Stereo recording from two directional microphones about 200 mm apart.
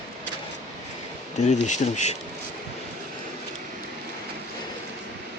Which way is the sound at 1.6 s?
35° left (ahead or behind).